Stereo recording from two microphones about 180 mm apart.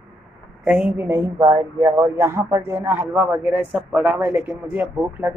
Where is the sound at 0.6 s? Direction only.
5° right (ahead or behind).